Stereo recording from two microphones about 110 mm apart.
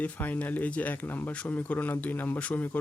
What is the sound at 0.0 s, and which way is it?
Speech, 15° left (ahead or behind).